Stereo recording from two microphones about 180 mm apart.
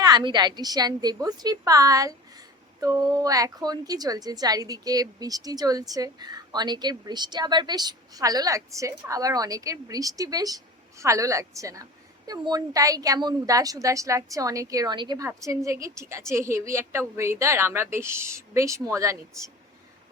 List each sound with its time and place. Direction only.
0.0 s a woman's voice: 25° right (ahead or behind)